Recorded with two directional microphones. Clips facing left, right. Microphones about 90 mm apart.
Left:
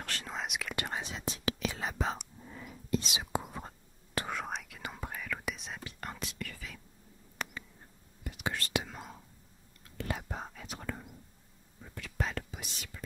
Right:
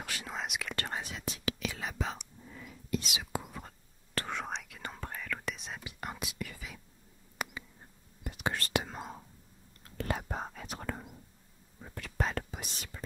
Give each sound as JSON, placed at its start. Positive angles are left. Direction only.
{"t": 0.0, "sound": "whispering", "side_deg": -5}
{"t": 0.7, "sound": "speech", "side_deg": 10}
{"t": 1.0, "sound": "whispering", "side_deg": 30}
{"t": 4.3, "sound": "whispering", "side_deg": 0}
{"t": 5.9, "sound": "whispering", "side_deg": -10}
{"t": 7.4, "sound": "a sound", "side_deg": -10}
{"t": 8.2, "sound": "whispering", "side_deg": -40}
{"t": 9.8, "sound": "whispering", "side_deg": -45}